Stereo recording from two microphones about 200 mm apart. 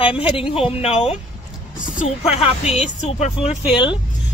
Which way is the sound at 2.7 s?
35° left (ahead or behind).